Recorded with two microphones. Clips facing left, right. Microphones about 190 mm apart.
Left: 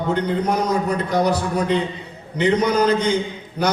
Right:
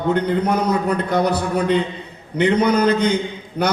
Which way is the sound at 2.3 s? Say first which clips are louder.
Right 1 dB; 60° right (ahead or behind).